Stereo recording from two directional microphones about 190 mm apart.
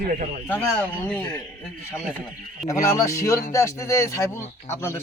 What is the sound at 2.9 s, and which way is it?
A man's voice, 15° left (ahead or behind).